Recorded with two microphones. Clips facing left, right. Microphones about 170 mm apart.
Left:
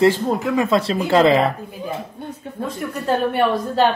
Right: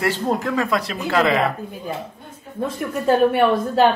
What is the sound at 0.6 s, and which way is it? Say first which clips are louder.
Speech: left 4 dB; 25° left (ahead or behind).